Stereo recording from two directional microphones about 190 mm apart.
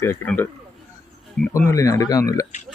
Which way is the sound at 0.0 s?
10° left (ahead or behind).